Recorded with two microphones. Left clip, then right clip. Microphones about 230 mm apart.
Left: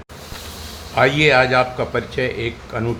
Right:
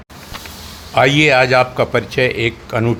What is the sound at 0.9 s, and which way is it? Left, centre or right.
A man's voice, right.